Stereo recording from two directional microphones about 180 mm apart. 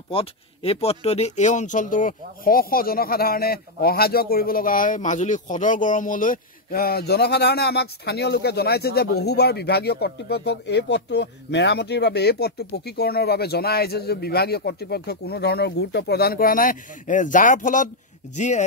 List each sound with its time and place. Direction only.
0.1 s speech: 30° left (ahead or behind)